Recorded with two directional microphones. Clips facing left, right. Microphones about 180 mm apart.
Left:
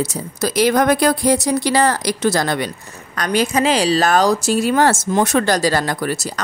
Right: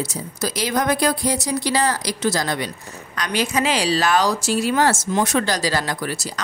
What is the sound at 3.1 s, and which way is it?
A woman's voice, 45° left (ahead or behind).